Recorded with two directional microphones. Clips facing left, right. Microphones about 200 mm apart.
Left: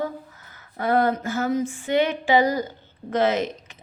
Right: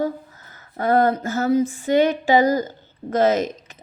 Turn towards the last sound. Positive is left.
turn(degrees=-40)  # may be behind; listen again after turning